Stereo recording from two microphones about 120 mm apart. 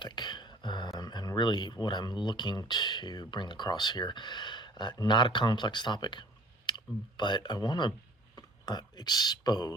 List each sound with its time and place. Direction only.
0.0 s speech: 40° left (ahead or behind)